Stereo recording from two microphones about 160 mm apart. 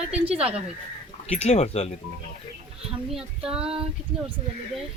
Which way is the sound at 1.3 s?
45° left (ahead or behind).